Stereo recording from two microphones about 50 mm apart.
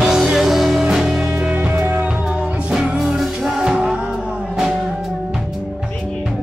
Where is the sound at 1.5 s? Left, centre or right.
Right.